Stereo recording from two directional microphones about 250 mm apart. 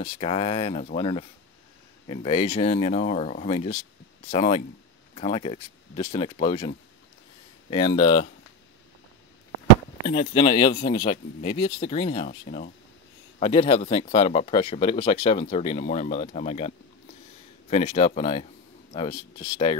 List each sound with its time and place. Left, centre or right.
0.0 s speech: left
7.7 s speech: centre
10.0 s speech: left